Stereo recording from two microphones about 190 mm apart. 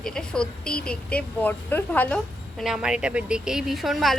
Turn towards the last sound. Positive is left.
turn(degrees=0)  # may be behind; listen again after turning